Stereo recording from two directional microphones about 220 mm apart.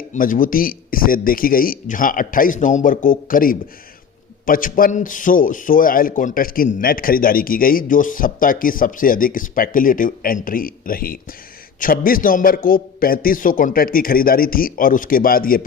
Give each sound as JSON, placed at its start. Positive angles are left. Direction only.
{"t": 0.1, "sound": "a man's voice", "side_deg": 40}